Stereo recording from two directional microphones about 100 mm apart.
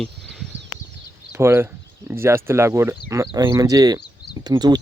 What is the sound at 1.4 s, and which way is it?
Speech, 25° right (ahead or behind).